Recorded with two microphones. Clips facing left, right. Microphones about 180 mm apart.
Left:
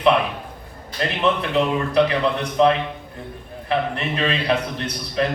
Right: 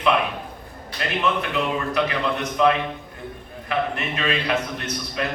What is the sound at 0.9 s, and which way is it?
A man's voice, 30° left (ahead or behind).